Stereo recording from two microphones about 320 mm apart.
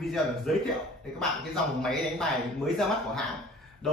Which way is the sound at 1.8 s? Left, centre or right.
Centre.